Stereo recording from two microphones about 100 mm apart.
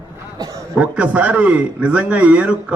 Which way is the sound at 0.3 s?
35° right (ahead or behind).